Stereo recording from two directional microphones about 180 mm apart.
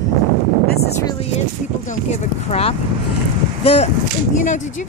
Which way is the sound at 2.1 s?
35° left (ahead or behind).